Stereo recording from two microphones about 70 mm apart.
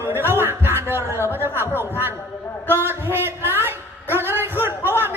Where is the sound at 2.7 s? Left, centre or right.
Right.